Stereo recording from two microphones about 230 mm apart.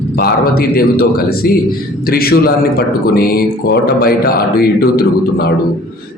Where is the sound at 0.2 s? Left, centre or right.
Left.